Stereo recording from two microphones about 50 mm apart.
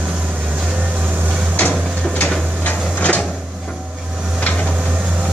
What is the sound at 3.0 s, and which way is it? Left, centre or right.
Cupboard open or close, left.